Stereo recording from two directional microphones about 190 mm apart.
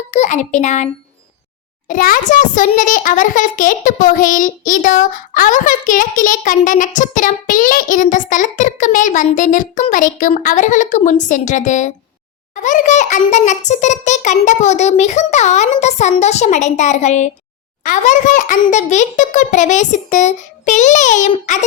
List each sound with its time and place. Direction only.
0.1 s a child's voice: 40° left (ahead or behind)
1.9 s a child's voice: 45° left (ahead or behind)